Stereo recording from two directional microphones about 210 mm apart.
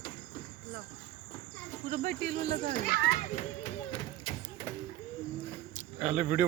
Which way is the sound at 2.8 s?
45° left (ahead or behind).